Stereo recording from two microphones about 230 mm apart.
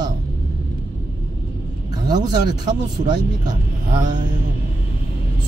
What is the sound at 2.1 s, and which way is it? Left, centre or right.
Speech, centre.